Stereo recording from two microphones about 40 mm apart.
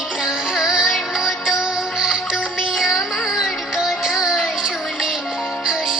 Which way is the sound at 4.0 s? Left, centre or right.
Centre.